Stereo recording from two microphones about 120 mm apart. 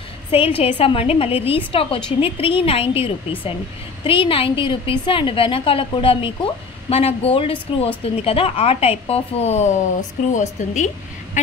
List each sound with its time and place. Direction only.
0.3 s a woman's voice: 55° left (ahead or behind); by 9.8 s 75° left (ahead or behind)
10.3 s a woman's voice: 85° left